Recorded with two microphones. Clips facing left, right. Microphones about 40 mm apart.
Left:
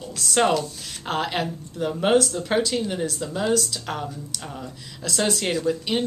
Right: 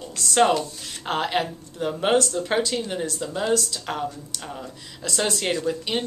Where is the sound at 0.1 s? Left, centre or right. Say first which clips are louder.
Right 1 dB; centre.